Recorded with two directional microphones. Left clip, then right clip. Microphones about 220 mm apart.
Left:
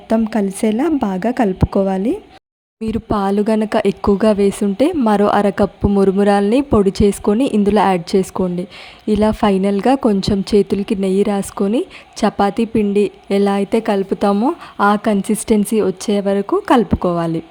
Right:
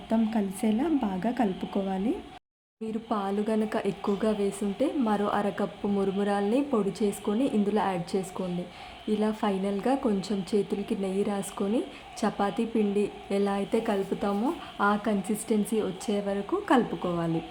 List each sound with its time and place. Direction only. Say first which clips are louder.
0.1 s speech: left 12 dB; 45° left (ahead or behind)